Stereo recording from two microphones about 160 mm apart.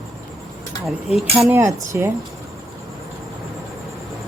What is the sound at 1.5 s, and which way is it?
Speech, 15° right (ahead or behind).